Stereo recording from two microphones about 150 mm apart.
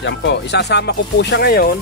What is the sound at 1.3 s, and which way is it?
Speech, 90° left.